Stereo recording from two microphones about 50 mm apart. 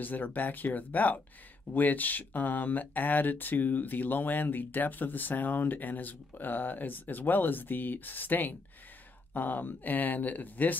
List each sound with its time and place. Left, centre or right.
0.0 s speech: left